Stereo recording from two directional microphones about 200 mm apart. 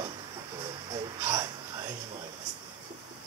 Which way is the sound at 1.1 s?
15° right (ahead or behind).